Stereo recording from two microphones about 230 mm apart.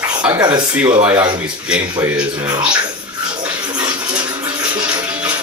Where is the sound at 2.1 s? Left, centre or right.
Centre.